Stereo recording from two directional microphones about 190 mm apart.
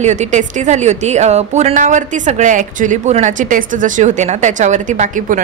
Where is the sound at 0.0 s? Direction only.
40° right (ahead or behind).